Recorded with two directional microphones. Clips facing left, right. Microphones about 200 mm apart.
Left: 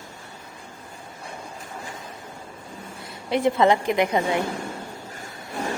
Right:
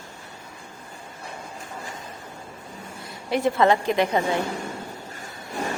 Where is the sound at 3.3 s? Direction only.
20° left (ahead or behind).